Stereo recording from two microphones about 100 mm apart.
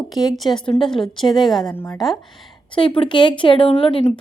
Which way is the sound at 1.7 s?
20° left (ahead or behind).